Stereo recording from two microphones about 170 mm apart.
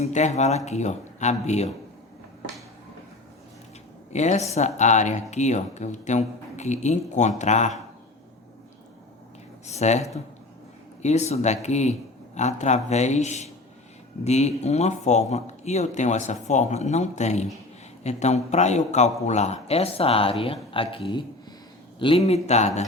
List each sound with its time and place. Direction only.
0.0 s speech: 45° left (ahead or behind)
4.1 s speech: 40° left (ahead or behind)
9.6 s speech: 40° left (ahead or behind)